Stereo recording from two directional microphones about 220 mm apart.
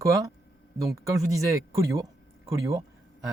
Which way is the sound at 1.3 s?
15° right (ahead or behind).